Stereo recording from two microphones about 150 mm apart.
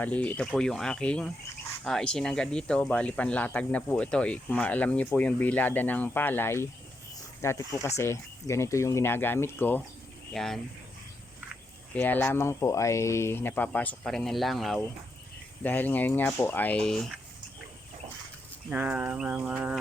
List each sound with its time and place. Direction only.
0.0 s speech: 10° left (ahead or behind)
10.3 s speech: 5° left (ahead or behind)
11.9 s speech: 10° left (ahead or behind)
15.6 s speech: 10° left (ahead or behind)
18.7 s speech: 10° right (ahead or behind)